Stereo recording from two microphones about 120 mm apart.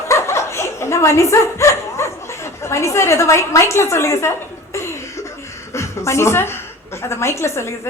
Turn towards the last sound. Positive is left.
turn(degrees=20)  # may be behind; listen again after turning